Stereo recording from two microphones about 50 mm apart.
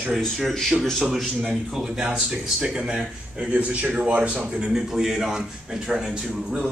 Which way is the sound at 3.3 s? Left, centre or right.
Right.